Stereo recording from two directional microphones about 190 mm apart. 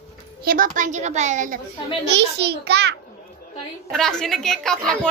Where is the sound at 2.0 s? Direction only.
65° right (ahead or behind).